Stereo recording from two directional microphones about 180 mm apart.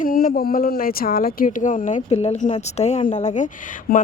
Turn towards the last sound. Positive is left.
turn(degrees=45)  # may be behind; listen again after turning